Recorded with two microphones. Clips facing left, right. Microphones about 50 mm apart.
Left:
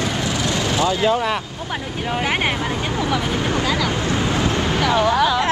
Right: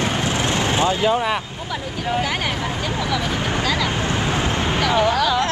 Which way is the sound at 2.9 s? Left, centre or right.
Left.